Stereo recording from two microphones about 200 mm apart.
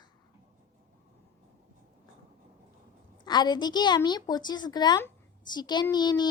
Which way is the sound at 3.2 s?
20° left (ahead or behind).